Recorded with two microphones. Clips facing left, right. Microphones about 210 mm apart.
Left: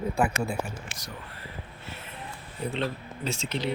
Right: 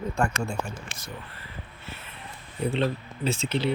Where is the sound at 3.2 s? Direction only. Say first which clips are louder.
Right 5 dB; 55° right (ahead or behind).